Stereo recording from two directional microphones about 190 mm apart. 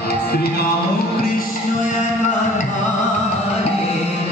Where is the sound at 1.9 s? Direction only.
40° left (ahead or behind).